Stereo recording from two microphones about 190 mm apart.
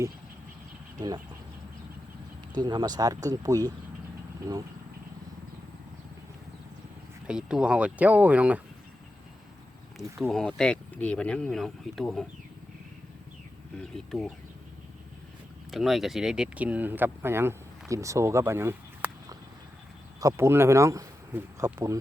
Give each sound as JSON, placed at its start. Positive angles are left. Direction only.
{"t": 0.9, "sound": "speech", "side_deg": -20}
{"t": 2.6, "sound": "speech", "side_deg": -20}
{"t": 7.3, "sound": "speech", "side_deg": -5}
{"t": 10.0, "sound": "speech", "side_deg": 0}
{"t": 13.9, "sound": "speech", "side_deg": 0}
{"t": 15.7, "sound": "speech", "side_deg": 0}